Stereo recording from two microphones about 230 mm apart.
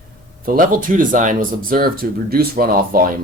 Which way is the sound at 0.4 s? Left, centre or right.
Right.